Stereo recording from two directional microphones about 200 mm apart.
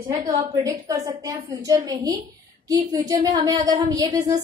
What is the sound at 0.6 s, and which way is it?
A woman's voice, 15° right (ahead or behind).